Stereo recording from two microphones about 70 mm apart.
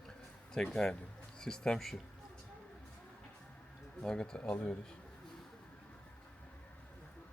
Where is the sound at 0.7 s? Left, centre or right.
Centre.